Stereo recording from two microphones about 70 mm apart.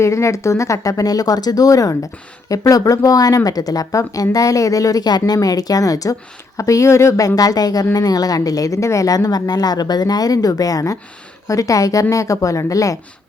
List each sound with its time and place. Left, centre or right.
0.0 s speech: left
11.4 s speech: left